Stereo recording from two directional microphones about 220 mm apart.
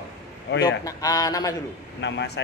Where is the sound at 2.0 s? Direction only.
50° left (ahead or behind).